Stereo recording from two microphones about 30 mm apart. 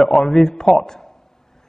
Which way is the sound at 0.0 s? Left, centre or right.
Centre.